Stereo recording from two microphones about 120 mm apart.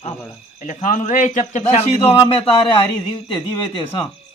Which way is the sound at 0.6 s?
90° left.